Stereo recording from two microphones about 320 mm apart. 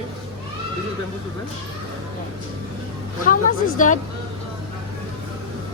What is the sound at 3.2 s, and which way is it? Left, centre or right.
Speech, left.